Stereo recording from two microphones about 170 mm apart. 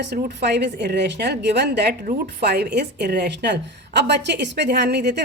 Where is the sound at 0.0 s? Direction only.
75° right (ahead or behind).